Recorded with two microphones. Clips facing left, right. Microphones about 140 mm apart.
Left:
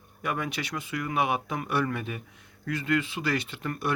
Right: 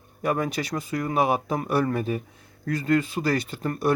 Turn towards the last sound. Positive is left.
turn(degrees=-40)  # may be behind; listen again after turning